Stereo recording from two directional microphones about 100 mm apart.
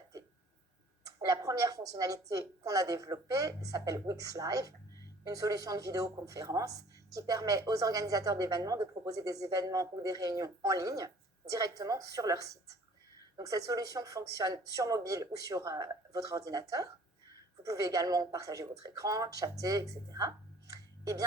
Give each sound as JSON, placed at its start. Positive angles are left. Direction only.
{"t": 1.0, "sound": "speech", "side_deg": -35}